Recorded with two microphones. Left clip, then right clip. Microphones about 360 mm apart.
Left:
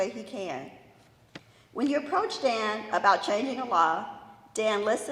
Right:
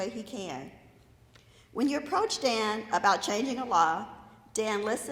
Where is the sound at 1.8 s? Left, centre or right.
Right.